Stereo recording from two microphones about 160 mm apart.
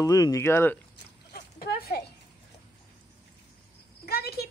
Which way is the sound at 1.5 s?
70° left (ahead or behind).